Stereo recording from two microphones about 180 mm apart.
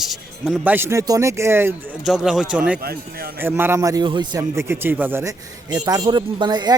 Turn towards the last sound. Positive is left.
turn(degrees=-25)  # may be behind; listen again after turning